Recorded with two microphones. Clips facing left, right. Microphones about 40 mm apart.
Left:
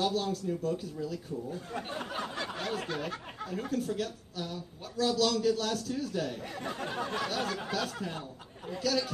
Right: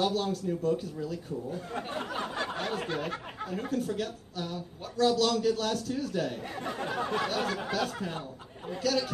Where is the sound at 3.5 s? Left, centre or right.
Centre.